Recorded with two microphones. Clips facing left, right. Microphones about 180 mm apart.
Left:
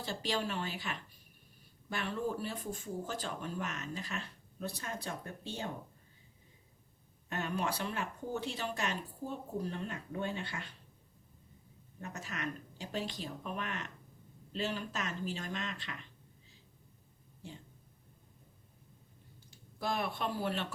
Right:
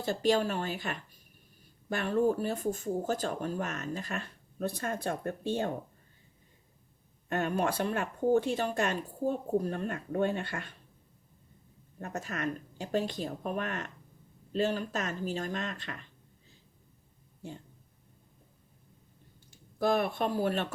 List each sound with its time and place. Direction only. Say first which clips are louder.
0.0 s speech: right 9 dB; 50° right (ahead or behind)
7.3 s speech: right 6 dB; 50° right (ahead or behind)
11.9 s speech: right 6 dB; 50° right (ahead or behind)
19.5 s speech: right 9 dB; 50° right (ahead or behind)